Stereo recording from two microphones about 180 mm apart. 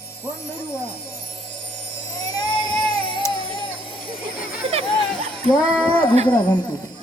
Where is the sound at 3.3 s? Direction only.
30° left (ahead or behind).